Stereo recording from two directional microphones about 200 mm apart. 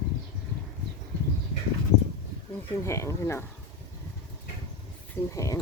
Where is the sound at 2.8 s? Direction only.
15° left (ahead or behind).